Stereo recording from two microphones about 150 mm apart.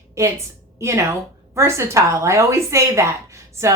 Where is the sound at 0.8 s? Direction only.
20° right (ahead or behind).